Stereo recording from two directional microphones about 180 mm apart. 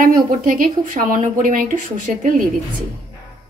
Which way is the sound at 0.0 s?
50° right (ahead or behind).